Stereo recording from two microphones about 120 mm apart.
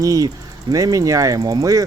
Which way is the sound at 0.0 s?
30° right (ahead or behind).